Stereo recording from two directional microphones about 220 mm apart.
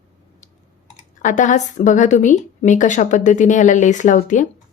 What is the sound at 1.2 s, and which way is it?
A woman's voice, 35° left (ahead or behind).